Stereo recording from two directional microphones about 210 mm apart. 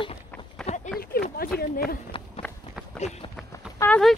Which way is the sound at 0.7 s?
30° left (ahead or behind).